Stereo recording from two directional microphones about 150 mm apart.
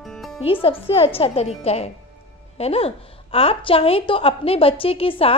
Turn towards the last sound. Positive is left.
turn(degrees=40)  # may be behind; listen again after turning